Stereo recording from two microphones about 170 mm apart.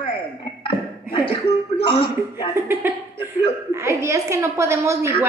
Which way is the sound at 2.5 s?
15° right (ahead or behind).